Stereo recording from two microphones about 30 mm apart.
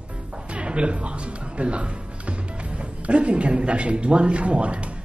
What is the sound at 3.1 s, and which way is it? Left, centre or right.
Speech, right.